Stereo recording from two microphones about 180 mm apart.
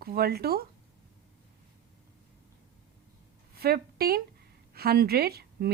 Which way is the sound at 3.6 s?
60° right (ahead or behind).